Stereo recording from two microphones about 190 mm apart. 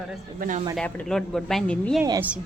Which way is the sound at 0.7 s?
5° left (ahead or behind).